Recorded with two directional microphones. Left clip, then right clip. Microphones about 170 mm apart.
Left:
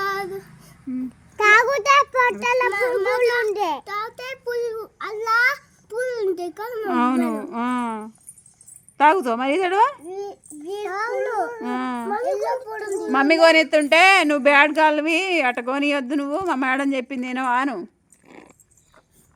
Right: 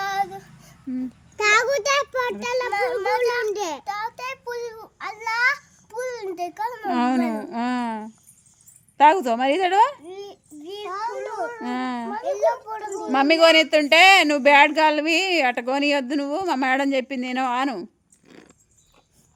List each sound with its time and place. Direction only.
0.0 s female singing: 10° right (ahead or behind)
1.4 s child singing: centre (ahead or behind); by 8.1 s 25° right (ahead or behind)
9.0 s speech: 20° right (ahead or behind)
10.1 s a child's voice: 5° right (ahead or behind)
11.6 s speech: 25° right (ahead or behind)
12.1 s a child's voice: 5° right (ahead or behind)
13.1 s speech: 25° right (ahead or behind)
18.3 s dog: 10° right (ahead or behind)